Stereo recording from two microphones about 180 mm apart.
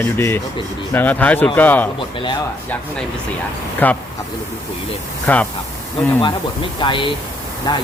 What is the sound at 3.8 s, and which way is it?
Speech, 10° left (ahead or behind).